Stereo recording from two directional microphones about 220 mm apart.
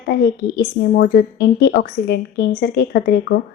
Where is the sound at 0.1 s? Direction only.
45° left (ahead or behind).